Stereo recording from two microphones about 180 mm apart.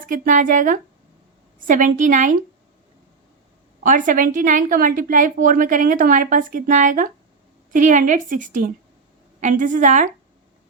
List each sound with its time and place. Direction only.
0.0 s a woman's voice: 45° right (ahead or behind)
3.8 s a woman's voice: 45° right (ahead or behind)